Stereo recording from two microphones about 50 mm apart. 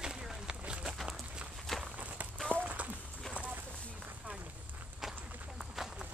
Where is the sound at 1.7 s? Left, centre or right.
Centre.